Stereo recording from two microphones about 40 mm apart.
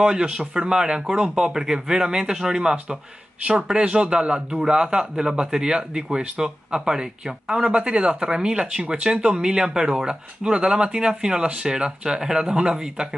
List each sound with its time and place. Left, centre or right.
0.0 s a man's voice: right